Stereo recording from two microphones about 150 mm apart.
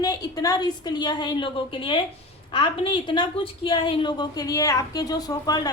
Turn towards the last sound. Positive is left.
turn(degrees=25)  # may be behind; listen again after turning